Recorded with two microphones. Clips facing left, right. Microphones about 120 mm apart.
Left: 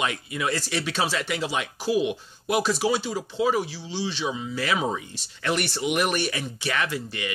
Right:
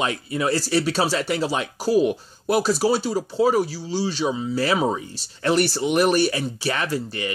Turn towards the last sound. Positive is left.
turn(degrees=-35)  # may be behind; listen again after turning